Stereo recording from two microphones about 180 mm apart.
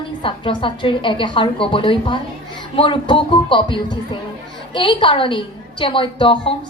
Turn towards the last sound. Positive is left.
turn(degrees=30)  # may be behind; listen again after turning